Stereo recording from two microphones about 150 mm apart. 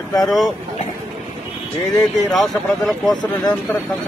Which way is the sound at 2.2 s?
Centre (ahead or behind).